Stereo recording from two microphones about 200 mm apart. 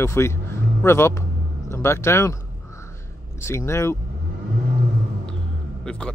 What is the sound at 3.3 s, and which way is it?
Speech, 15° left (ahead or behind).